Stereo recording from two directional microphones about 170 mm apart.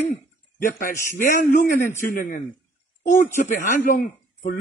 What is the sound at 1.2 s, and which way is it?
A man's voice, 55° left (ahead or behind).